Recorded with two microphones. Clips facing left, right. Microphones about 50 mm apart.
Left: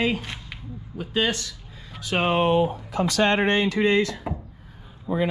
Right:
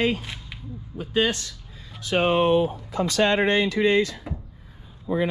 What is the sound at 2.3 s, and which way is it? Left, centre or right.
Speech, left.